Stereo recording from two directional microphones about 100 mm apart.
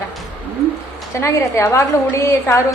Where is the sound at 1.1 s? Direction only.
30° left (ahead or behind).